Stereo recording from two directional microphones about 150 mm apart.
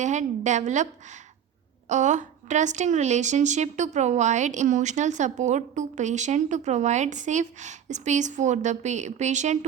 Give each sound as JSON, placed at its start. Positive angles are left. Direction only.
{"t": 0.0, "sound": "speech", "side_deg": -50}